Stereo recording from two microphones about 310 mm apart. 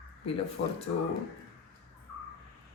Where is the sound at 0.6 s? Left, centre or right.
Left.